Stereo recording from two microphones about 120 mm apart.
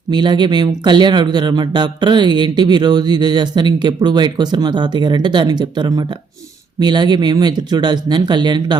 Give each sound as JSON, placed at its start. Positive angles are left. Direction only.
{"t": 0.1, "sound": "speech", "side_deg": -35}